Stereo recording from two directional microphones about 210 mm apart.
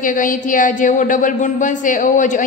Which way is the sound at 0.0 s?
40° left (ahead or behind).